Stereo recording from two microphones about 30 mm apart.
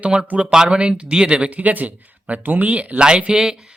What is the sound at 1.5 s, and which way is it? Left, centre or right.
Speech, right.